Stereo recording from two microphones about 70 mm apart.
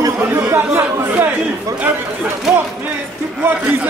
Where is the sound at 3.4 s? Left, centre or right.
Right.